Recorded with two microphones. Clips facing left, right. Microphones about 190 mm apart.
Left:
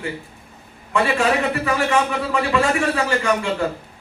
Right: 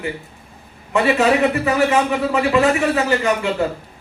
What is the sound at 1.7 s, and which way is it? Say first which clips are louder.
Speech: right 1 dB; 20° right (ahead or behind).